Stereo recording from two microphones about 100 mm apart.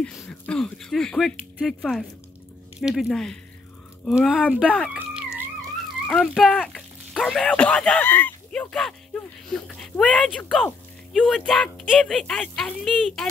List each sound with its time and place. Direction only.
0.0 s speech: 5° left (ahead or behind)
4.2 s speech: 10° right (ahead or behind)
4.9 s music: 15° right (ahead or behind)
6.0 s speech: 10° left (ahead or behind)
8.5 s a sound: 10° left (ahead or behind)
9.8 s speech: 5° left (ahead or behind)